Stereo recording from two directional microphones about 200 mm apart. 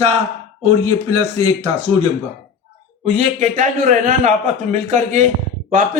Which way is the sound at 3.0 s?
30° right (ahead or behind).